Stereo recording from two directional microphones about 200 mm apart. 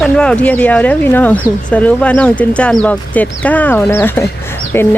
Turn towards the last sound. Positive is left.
turn(degrees=15)  # may be behind; listen again after turning